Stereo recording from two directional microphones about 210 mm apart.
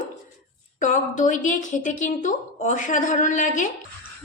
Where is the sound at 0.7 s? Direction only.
35° left (ahead or behind).